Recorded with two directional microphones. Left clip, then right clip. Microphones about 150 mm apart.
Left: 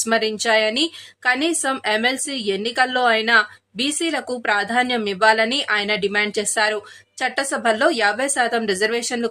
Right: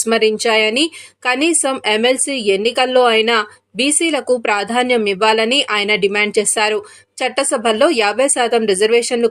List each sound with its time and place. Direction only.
0.0 s a woman's voice: 15° right (ahead or behind)